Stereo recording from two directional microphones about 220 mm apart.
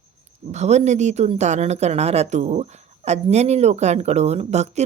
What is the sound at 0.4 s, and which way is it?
A woman's voice, 30° right (ahead or behind).